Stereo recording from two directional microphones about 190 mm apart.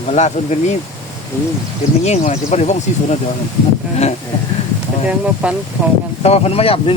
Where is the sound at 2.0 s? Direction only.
35° left (ahead or behind).